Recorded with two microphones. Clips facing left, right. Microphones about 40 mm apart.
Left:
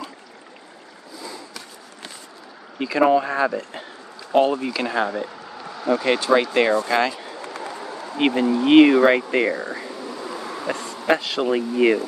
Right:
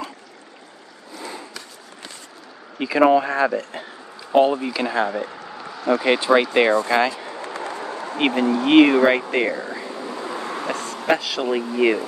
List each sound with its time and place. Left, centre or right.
2.8 s speech: centre
7.4 s run: right
8.6 s speech: centre
10.1 s a sound: right
11.1 s speech: centre
11.4 s speech: centre